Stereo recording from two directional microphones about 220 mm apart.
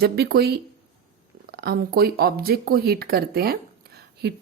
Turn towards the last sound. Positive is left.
turn(degrees=-45)  # may be behind; listen again after turning